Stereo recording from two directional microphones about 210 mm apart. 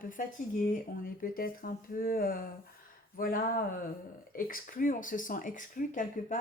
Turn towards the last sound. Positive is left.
turn(degrees=40)  # may be behind; listen again after turning